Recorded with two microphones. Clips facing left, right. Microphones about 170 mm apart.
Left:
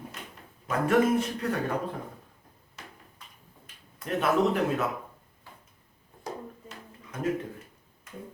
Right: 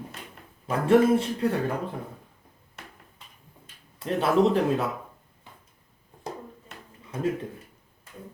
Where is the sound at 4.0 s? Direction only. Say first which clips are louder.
Right 3 dB; 30° right (ahead or behind).